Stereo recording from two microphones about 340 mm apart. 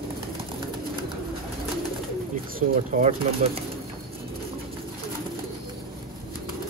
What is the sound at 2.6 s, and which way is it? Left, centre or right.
Speech, right.